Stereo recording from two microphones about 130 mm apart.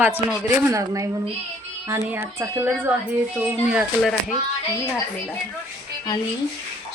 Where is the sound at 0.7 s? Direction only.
25° right (ahead or behind).